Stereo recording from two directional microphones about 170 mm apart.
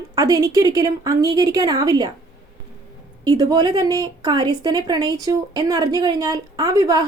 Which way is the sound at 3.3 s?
25° right (ahead or behind).